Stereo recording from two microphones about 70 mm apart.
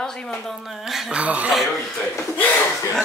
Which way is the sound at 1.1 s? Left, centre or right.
Centre.